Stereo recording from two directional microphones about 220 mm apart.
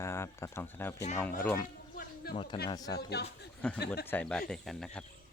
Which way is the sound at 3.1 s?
50° left (ahead or behind).